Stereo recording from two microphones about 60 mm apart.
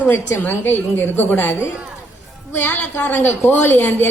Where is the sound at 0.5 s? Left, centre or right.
Left.